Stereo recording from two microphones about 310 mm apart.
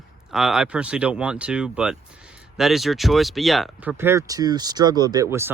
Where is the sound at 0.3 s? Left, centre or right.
Centre.